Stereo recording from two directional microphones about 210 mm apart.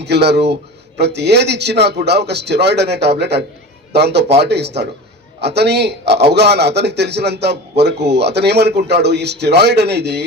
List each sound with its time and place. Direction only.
0.0 s a man's voice: 50° right (ahead or behind)